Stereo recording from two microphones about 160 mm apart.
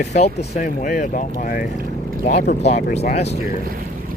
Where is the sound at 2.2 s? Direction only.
45° left (ahead or behind).